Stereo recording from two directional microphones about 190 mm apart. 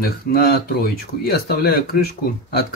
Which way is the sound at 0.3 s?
55° left (ahead or behind).